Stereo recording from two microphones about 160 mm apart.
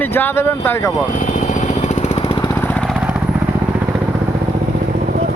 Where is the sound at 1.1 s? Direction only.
55° left (ahead or behind); by 2.4 s 35° left (ahead or behind).